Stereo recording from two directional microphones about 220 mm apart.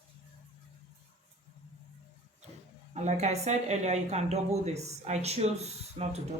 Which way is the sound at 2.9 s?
30° right (ahead or behind).